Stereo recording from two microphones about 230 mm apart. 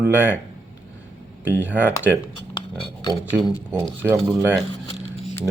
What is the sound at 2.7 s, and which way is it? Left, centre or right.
Speech, left.